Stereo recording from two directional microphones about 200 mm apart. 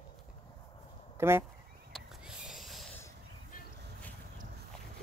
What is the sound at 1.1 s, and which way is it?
Speech, 10° right (ahead or behind).